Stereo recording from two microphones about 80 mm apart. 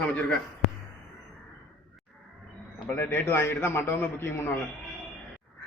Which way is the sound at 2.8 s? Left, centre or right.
Left.